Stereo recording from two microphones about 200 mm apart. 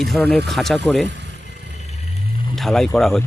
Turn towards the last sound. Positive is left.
turn(degrees=0)  # may be behind; listen again after turning